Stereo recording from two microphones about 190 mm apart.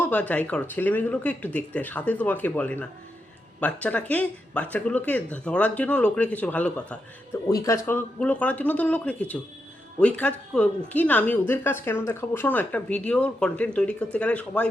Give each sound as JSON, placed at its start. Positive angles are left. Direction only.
{"t": 0.0, "sound": "a woman's voice", "side_deg": 10}